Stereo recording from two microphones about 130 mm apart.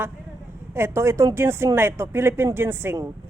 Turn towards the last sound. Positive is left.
turn(degrees=-20)  # may be behind; listen again after turning